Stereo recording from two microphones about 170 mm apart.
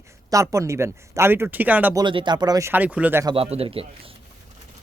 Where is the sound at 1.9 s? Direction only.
25° right (ahead or behind); by 3.3 s 10° right (ahead or behind).